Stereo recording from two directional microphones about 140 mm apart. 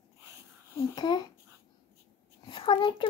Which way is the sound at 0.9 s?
30° left (ahead or behind).